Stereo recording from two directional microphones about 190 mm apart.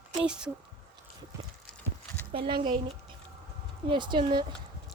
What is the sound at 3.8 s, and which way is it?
Speech, 25° right (ahead or behind).